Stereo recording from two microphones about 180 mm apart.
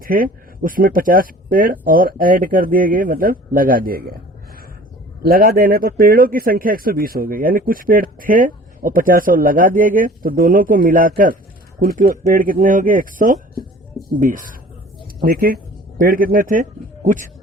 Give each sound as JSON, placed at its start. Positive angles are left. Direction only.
{"t": 0.0, "sound": "speech", "side_deg": -50}
{"t": 5.2, "sound": "speech", "side_deg": -55}